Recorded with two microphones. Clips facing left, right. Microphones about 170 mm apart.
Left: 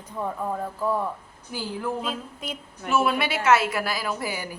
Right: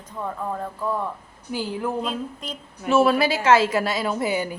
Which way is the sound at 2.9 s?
35° right (ahead or behind).